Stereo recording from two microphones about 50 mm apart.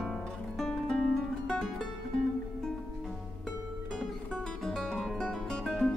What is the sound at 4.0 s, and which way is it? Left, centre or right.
Music, centre.